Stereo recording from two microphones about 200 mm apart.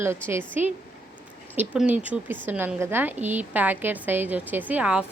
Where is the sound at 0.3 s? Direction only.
10° right (ahead or behind).